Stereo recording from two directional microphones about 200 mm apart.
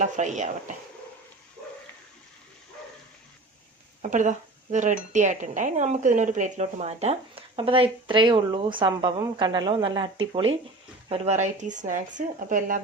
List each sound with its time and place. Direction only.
0.0 s speech: 35° right (ahead or behind)
4.0 s speech: 40° right (ahead or behind); by 10.1 s 20° right (ahead or behind)
11.1 s speech: 35° right (ahead or behind)